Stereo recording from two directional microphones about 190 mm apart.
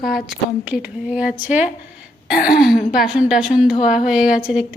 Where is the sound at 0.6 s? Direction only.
5° right (ahead or behind).